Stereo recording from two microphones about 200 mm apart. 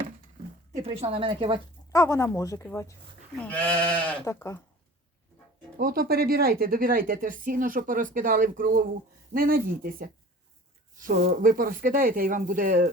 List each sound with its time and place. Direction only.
0.8 s speech: 30° right (ahead or behind)
1.9 s speech: 15° left (ahead or behind)
5.7 s speech: 50° right (ahead or behind)